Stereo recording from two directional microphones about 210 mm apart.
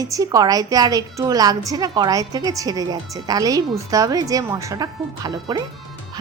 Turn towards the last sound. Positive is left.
turn(degrees=-20)  # may be behind; listen again after turning